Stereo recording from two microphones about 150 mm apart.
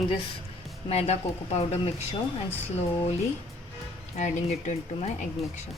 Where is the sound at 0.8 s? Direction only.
45° left (ahead or behind).